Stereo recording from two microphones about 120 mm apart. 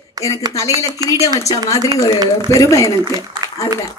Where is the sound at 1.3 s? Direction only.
25° left (ahead or behind).